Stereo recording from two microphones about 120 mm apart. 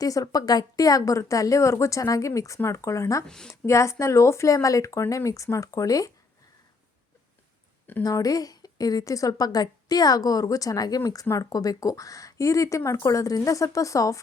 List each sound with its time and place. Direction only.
0.0 s a woman's voice: 30° left (ahead or behind)
3.2 s speech: 5° left (ahead or behind)
3.7 s a woman's voice: 25° left (ahead or behind)
8.0 s a woman's voice: 30° left (ahead or behind)